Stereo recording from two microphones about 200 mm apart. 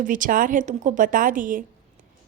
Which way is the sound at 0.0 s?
40° right (ahead or behind).